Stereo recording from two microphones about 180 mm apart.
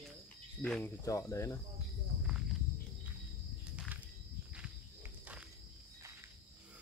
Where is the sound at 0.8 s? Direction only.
15° left (ahead or behind).